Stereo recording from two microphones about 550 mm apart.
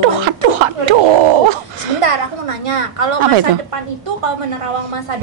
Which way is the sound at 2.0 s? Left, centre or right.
Right.